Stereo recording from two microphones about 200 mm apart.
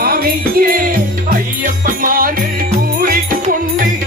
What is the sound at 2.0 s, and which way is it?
Music, 45° right (ahead or behind).